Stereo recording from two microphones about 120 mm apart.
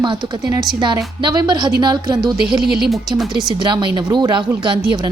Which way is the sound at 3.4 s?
40° right (ahead or behind).